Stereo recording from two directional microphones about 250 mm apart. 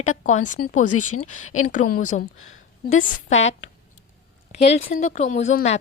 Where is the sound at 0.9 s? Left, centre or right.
Left.